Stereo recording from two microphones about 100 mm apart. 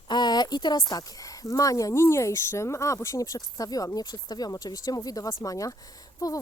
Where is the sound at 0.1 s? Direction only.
45° left (ahead or behind).